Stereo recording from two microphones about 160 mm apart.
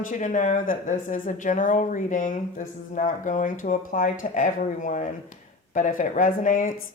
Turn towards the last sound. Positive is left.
turn(degrees=55)  # may be behind; listen again after turning